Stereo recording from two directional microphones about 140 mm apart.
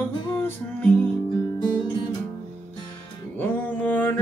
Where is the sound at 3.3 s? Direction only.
10° left (ahead or behind).